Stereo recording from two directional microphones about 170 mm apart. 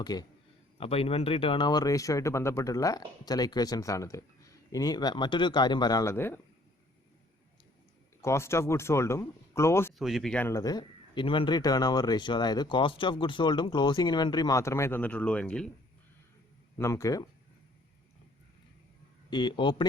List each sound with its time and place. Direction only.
0.0 s speech: 25° left (ahead or behind)
0.8 s speech: 35° left (ahead or behind); by 6.4 s 10° left (ahead or behind)
8.2 s speech: 15° left (ahead or behind)
10.0 s speech: centre (ahead or behind)
16.7 s speech: 15° left (ahead or behind)
19.3 s speech: 25° left (ahead or behind)